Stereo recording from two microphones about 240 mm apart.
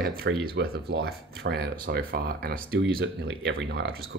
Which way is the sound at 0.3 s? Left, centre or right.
Right.